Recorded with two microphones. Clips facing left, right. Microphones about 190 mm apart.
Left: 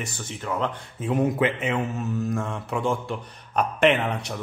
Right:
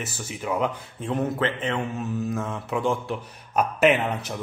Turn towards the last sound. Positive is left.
turn(degrees=-5)  # may be behind; listen again after turning